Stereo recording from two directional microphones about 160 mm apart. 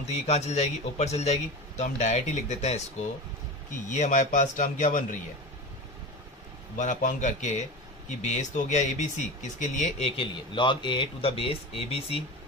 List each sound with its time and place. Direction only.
0.0 s a man's voice: 40° left (ahead or behind)
3.9 s a man's voice: 50° left (ahead or behind)
6.8 s a man's voice: 50° left (ahead or behind)